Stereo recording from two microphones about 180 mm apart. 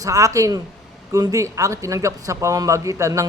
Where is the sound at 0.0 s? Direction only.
20° right (ahead or behind).